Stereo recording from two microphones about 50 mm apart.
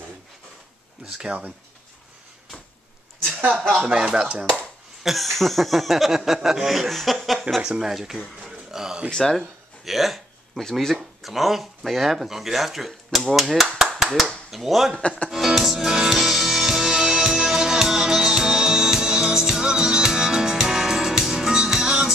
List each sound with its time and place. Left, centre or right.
1.0 s speech: centre
3.8 s speech: centre
5.0 s speech: centre
7.6 s speech: right
7.9 s speech: centre
8.5 s a sound: centre
9.1 s speech: centre
9.8 s a sound: centre
10.6 s speech: centre
15.0 s speech: left
15.2 s music: centre